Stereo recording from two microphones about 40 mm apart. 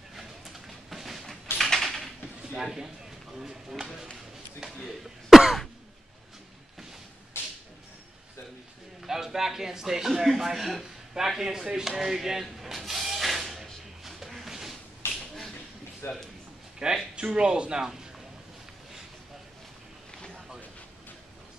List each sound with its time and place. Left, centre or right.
0.1 s a sound: centre
2.6 s speech: centre
4.6 s speech: centre
7.3 s whip: left
9.0 s speech: centre
12.0 s a sound: centre
16.0 s speech: left
16.8 s speech: centre